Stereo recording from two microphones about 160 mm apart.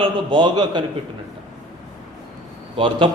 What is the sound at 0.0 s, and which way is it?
Speech, 30° right (ahead or behind).